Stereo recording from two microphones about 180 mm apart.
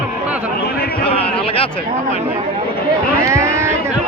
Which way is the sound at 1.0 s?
30° left (ahead or behind).